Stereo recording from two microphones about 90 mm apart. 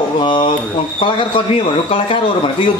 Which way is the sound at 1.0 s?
80° left.